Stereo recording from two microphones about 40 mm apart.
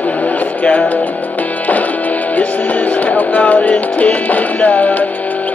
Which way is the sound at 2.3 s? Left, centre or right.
Left.